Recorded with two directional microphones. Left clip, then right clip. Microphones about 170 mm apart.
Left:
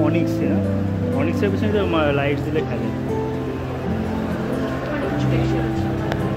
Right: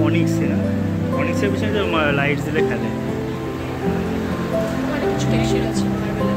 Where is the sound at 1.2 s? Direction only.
20° left (ahead or behind).